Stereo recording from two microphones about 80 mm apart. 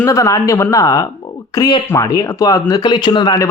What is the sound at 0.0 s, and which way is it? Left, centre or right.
Speech, left.